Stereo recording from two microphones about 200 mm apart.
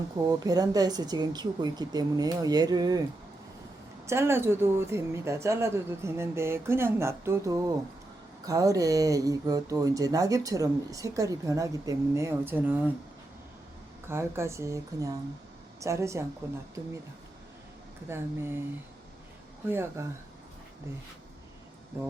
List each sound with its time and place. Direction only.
0.3 s speech: 20° right (ahead or behind)
4.0 s speech: 15° right (ahead or behind)
14.1 s speech: 15° right (ahead or behind)
18.1 s speech: 10° right (ahead or behind)
19.6 s speech: 10° right (ahead or behind)